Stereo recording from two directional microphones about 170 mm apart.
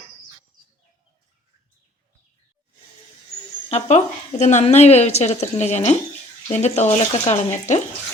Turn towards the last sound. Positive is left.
turn(degrees=40)  # may be behind; listen again after turning